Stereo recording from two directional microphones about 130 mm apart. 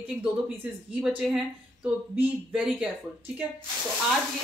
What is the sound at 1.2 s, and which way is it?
Speech, 5° right (ahead or behind).